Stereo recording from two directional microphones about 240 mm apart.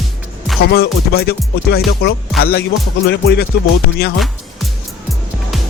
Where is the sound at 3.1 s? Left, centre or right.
Left.